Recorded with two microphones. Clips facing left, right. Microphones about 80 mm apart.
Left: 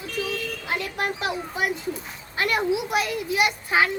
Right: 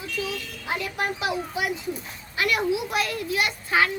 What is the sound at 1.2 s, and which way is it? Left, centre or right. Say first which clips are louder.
A woman's voice: even; left.